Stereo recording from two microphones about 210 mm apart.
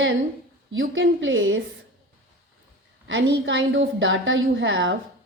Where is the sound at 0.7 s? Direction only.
65° right (ahead or behind).